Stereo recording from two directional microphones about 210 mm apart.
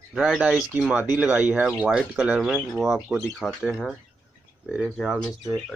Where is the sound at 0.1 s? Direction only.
Centre (ahead or behind).